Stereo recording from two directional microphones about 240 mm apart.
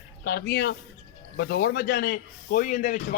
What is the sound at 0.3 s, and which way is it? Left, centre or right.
A man's voice, left.